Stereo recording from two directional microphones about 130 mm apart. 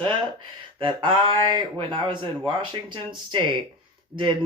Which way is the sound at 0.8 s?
40° right (ahead or behind).